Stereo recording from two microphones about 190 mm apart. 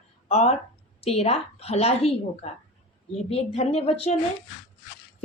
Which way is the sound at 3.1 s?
35° left (ahead or behind).